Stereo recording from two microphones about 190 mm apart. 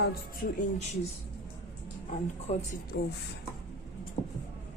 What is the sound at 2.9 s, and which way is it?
Speech, 60° left (ahead or behind).